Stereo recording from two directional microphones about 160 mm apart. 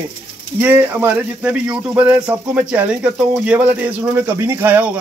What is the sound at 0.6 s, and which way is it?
Speech, 10° right (ahead or behind).